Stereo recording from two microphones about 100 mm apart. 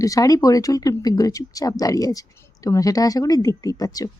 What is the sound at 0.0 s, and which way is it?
Speech, 35° left (ahead or behind).